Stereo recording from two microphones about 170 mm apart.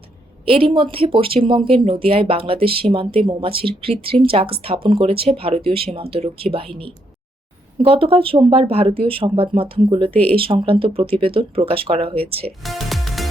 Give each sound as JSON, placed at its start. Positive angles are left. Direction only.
{"t": 0.4, "sound": "speech", "side_deg": -35}
{"t": 10.1, "sound": "speech", "side_deg": 10}
{"t": 10.3, "sound": "speech", "side_deg": -30}
{"t": 12.6, "sound": "music", "side_deg": 0}